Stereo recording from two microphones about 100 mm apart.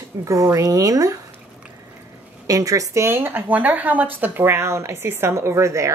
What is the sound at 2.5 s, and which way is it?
A woman's voice, 35° right (ahead or behind).